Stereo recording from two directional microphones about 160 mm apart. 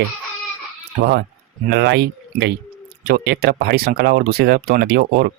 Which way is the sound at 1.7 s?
90° right.